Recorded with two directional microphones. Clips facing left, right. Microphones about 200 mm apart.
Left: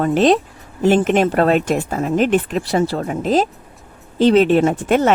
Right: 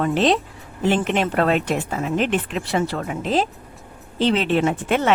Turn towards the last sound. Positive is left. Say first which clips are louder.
# left 5 dB
turn(degrees=45)  # may be behind; listen again after turning